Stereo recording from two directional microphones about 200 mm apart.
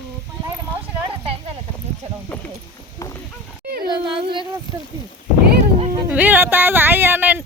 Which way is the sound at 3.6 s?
50° right (ahead or behind).